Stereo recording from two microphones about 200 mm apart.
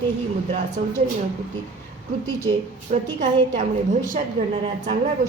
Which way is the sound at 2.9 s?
40° right (ahead or behind).